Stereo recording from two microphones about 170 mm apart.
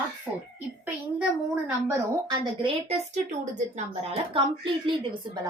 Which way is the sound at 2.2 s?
30° right (ahead or behind).